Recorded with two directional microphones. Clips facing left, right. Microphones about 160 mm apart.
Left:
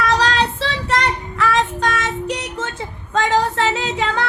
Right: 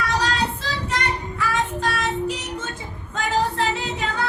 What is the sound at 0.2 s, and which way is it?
Child singing, 80° left.